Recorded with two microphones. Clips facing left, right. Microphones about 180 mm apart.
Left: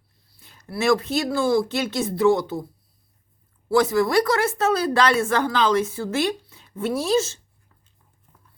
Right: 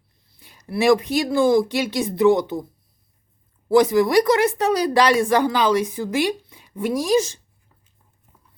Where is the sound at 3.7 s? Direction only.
20° right (ahead or behind).